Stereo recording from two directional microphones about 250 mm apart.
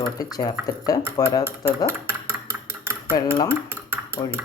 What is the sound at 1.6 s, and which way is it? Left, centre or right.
Dishes, centre.